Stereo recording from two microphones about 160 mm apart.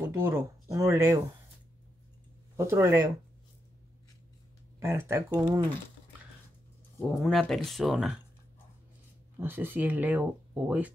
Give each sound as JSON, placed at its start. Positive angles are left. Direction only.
{"t": 0.0, "sound": "speech", "side_deg": -15}
{"t": 2.5, "sound": "speech", "side_deg": -15}
{"t": 4.7, "sound": "speech", "side_deg": -15}
{"t": 7.1, "sound": "speech", "side_deg": 0}
{"t": 9.4, "sound": "speech", "side_deg": -15}